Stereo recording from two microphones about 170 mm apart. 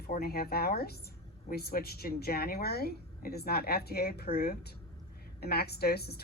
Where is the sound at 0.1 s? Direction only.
65° left (ahead or behind).